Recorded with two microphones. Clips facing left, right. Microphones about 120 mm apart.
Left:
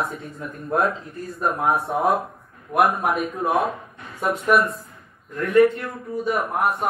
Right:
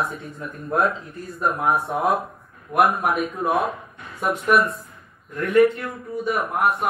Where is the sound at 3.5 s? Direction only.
Centre (ahead or behind).